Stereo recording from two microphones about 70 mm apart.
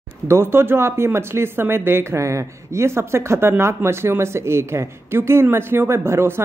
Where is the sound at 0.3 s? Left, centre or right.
Right.